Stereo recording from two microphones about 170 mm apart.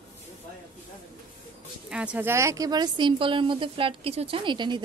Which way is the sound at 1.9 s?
5° right (ahead or behind).